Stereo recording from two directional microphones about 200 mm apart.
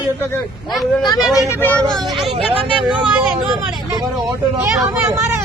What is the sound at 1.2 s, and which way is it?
Speech, centre (ahead or behind).